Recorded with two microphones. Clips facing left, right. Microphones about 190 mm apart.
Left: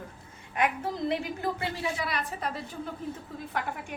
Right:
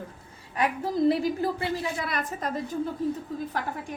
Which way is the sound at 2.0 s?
50° right (ahead or behind).